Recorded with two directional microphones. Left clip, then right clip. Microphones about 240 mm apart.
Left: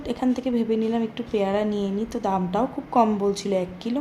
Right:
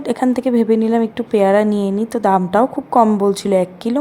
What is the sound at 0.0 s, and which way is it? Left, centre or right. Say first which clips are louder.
A woman's voice: right 8 dB; right.